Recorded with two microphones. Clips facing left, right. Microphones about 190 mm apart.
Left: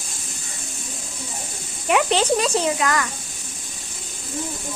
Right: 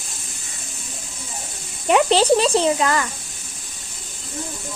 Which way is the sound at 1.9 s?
35° right (ahead or behind).